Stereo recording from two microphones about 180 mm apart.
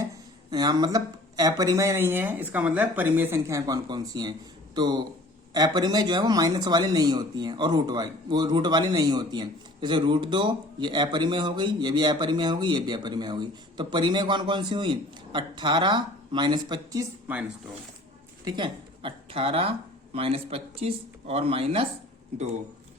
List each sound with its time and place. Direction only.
0.5 s speech: 20° right (ahead or behind)
17.3 s speech: 10° right (ahead or behind)
18.4 s speech: 25° right (ahead or behind)